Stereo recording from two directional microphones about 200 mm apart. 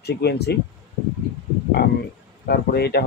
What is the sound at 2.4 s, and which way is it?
Speech, 50° left (ahead or behind).